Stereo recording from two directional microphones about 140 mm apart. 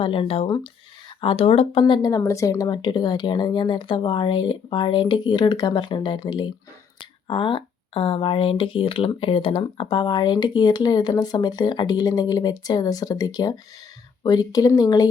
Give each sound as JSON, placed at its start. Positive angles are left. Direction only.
{"t": 0.0, "sound": "speech", "side_deg": 40}
{"t": 1.8, "sound": "speech", "side_deg": 30}